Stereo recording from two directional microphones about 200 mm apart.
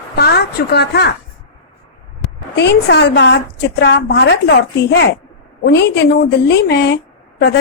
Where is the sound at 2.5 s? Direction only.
60° left (ahead or behind).